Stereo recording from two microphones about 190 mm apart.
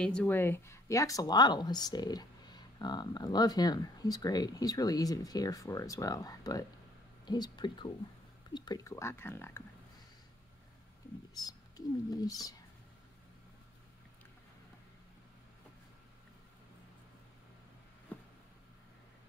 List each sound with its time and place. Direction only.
0.0 s speech: 5° left (ahead or behind)
11.3 s speech: 20° left (ahead or behind)
18.1 s a sound: 10° left (ahead or behind)